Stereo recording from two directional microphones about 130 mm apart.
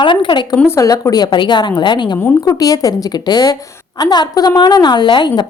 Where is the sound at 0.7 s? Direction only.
25° left (ahead or behind).